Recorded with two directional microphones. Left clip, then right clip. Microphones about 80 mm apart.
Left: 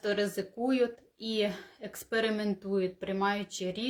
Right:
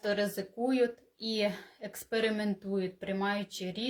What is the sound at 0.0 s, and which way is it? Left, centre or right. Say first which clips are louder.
Speech: left 1 dB; left.